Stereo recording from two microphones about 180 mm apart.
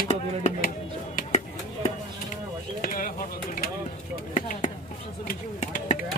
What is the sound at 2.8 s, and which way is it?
Speech, 50° left (ahead or behind).